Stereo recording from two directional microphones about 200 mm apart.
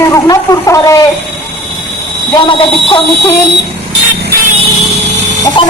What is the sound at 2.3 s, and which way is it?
Speech, 25° left (ahead or behind).